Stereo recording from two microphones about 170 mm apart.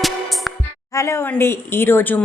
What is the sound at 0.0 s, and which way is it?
Music, centre (ahead or behind).